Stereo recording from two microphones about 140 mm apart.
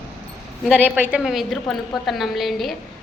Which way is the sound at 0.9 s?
15° right (ahead or behind).